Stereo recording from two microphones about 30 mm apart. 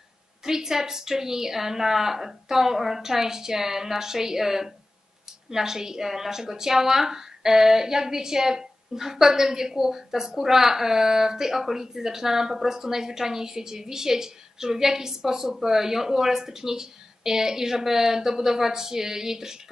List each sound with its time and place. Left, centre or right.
0.4 s a woman's voice: centre